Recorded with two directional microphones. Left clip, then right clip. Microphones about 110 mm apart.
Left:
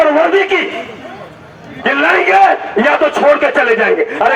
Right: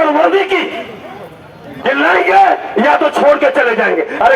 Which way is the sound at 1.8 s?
90° right.